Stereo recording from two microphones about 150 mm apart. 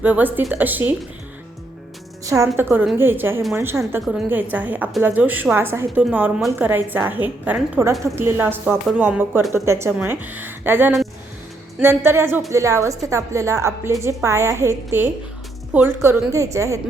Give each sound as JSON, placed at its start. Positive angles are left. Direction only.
{"t": 0.0, "sound": "speech", "side_deg": -10}
{"t": 2.2, "sound": "a woman's voice", "side_deg": -20}